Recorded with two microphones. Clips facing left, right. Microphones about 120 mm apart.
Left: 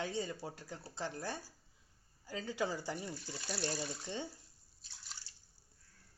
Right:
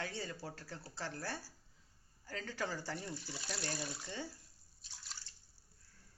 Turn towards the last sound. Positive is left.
turn(degrees=20)  # may be behind; listen again after turning